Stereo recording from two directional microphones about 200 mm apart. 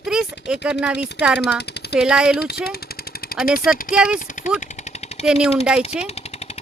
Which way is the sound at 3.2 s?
50° left (ahead or behind).